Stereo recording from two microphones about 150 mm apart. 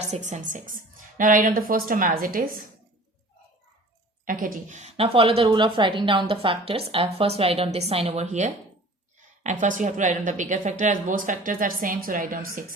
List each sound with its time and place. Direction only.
0.1 s a woman's voice: 50° right (ahead or behind); by 2.6 s 70° right (ahead or behind)
4.3 s a woman's voice: 65° right (ahead or behind)